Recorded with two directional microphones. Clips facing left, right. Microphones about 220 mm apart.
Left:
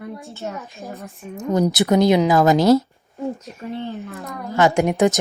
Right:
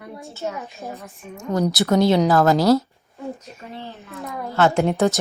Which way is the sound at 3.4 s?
Centre (ahead or behind).